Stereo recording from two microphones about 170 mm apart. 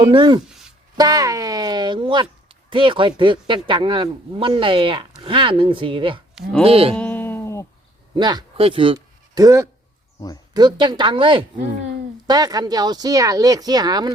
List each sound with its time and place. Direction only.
0.0 s speech: 30° right (ahead or behind)
6.9 s a sound: 10° left (ahead or behind)
8.1 s speech: 25° right (ahead or behind)
12.3 s speech: 20° right (ahead or behind)